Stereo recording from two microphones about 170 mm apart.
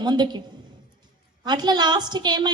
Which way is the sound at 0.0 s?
25° right (ahead or behind).